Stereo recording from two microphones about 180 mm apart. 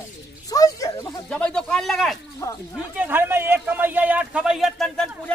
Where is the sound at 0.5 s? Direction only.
20° left (ahead or behind).